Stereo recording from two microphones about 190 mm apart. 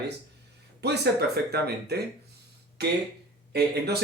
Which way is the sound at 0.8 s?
60° right (ahead or behind).